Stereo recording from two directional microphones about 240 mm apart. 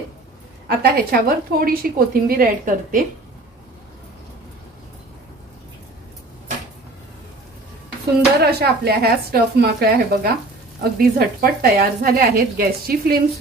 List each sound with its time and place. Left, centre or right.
0.7 s a woman's voice: right
8.4 s a woman's voice: right